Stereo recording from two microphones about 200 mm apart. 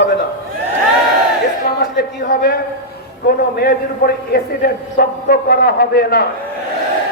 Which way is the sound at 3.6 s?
50° left (ahead or behind).